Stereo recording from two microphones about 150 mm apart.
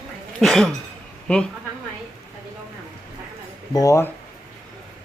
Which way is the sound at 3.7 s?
20° left (ahead or behind).